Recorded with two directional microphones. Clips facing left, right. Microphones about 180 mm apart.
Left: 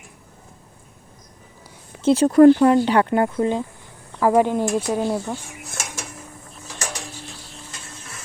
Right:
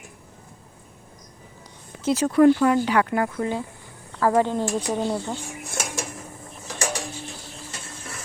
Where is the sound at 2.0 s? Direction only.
30° left (ahead or behind); by 5.4 s 5° left (ahead or behind).